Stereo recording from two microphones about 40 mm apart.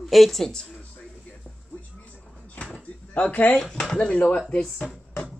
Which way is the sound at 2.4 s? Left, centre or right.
Left.